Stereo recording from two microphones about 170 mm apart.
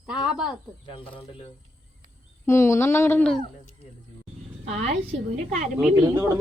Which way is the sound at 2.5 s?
15° left (ahead or behind).